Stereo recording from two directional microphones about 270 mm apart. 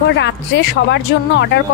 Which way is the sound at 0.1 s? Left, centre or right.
Left.